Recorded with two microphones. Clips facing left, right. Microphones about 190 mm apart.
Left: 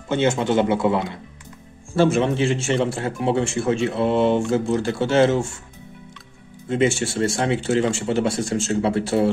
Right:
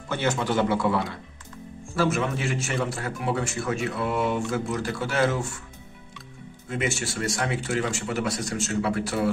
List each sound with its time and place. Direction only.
0.1 s a man's voice: 25° left (ahead or behind)
6.7 s a man's voice: 30° left (ahead or behind)